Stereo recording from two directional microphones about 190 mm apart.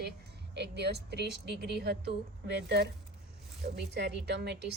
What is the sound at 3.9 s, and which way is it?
Speech, 65° right (ahead or behind).